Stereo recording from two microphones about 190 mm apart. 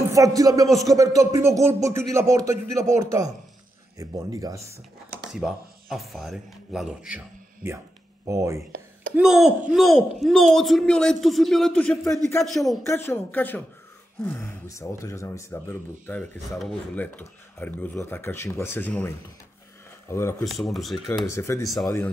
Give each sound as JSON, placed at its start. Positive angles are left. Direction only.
{"t": 0.1, "sound": "speech", "side_deg": -15}
{"t": 0.7, "sound": "a man's voice", "side_deg": 0}
{"t": 0.9, "sound": "speech", "side_deg": -20}
{"t": 5.3, "sound": "speech", "side_deg": 0}
{"t": 9.1, "sound": "a man's voice", "side_deg": -5}
{"t": 12.8, "sound": "speech", "side_deg": 10}
{"t": 20.4, "sound": "a man's voice", "side_deg": 0}
{"t": 21.1, "sound": "speech", "side_deg": 15}